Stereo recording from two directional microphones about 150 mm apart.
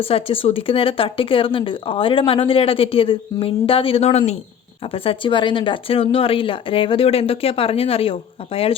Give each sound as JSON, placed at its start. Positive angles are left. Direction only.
{"t": 0.0, "sound": "speech", "side_deg": 40}